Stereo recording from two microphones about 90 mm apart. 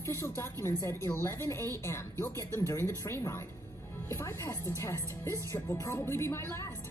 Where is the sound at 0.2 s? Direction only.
30° left (ahead or behind).